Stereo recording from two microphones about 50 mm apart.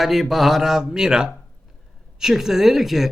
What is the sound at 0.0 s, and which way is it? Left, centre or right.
Speech, centre.